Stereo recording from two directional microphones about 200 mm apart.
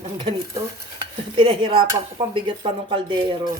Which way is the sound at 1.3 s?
25° right (ahead or behind).